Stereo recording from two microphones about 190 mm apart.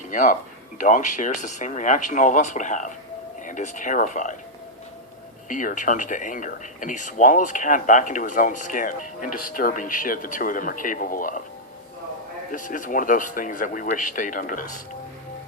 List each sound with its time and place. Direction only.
0.1 s speech: 45° left (ahead or behind)
5.5 s speech: 45° left (ahead or behind)
12.5 s speech: 45° left (ahead or behind)